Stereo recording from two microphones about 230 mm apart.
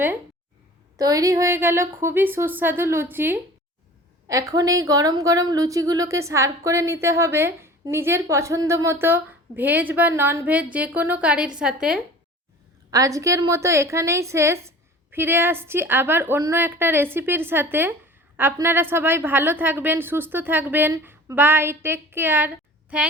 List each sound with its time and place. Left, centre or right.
0.9 s a woman's voice: centre
12.9 s a woman's voice: centre